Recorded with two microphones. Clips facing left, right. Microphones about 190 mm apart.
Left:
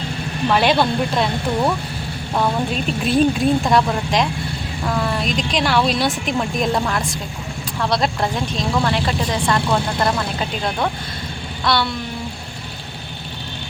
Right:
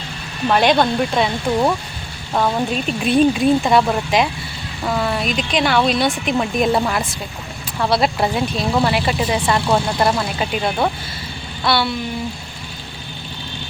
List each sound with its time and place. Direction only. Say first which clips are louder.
0.5 s speech: right 2 dB; 5° left (ahead or behind)
2.3 s speech: right 2 dB; centre (ahead or behind)